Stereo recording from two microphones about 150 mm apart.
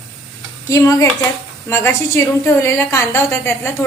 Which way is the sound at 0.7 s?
20° left (ahead or behind).